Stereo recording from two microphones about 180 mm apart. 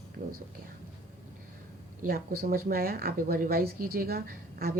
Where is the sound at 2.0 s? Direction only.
55° right (ahead or behind).